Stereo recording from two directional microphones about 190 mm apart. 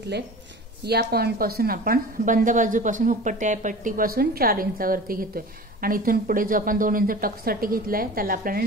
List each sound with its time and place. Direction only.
0.8 s a woman's voice: 55° right (ahead or behind)